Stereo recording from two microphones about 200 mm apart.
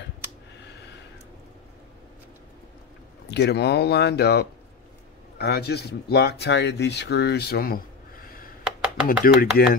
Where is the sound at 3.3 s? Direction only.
55° left (ahead or behind).